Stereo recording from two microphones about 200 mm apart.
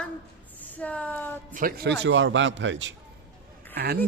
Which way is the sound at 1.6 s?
50° right (ahead or behind).